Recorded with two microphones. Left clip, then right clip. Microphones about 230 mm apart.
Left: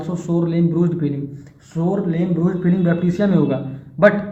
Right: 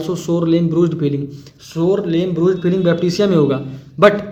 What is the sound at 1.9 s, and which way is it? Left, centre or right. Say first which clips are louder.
A man's voice: right 5 dB; right.